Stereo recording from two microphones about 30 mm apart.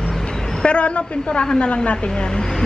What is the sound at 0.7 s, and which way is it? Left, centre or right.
A woman's voice, left.